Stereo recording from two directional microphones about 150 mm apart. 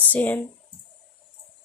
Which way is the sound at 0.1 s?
10° left (ahead or behind).